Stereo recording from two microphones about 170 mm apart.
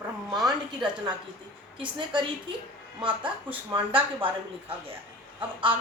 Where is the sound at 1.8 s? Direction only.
30° right (ahead or behind).